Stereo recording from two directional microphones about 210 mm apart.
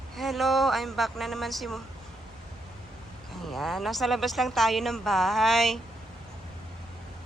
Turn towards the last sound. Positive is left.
turn(degrees=0)  # may be behind; listen again after turning